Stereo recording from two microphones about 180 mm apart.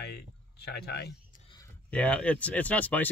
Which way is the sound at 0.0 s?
65° left (ahead or behind).